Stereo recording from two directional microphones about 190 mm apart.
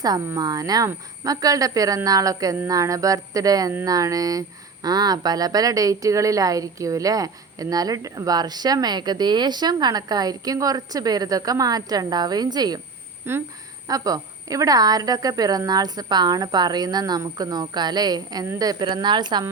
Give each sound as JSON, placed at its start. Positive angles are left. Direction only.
{"t": 0.0, "sound": "speech", "side_deg": -15}